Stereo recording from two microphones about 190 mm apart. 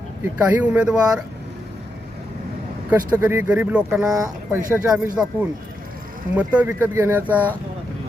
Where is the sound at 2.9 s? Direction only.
10° right (ahead or behind).